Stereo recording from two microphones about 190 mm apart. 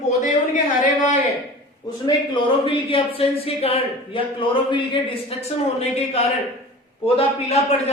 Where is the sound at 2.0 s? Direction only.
25° left (ahead or behind).